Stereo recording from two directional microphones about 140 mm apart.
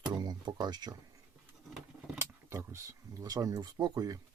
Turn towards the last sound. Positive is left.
turn(degrees=-25)  # may be behind; listen again after turning